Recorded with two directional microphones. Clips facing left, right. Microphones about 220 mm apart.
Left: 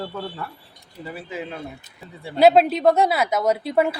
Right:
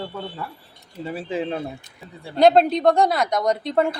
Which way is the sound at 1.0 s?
30° right (ahead or behind).